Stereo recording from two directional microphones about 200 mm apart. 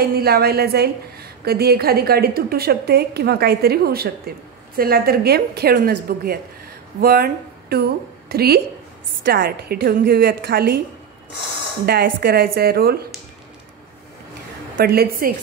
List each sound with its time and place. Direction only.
0.0 s a woman's voice: 50° right (ahead or behind)
11.8 s a woman's voice: 50° right (ahead or behind)
14.8 s a woman's voice: 45° right (ahead or behind)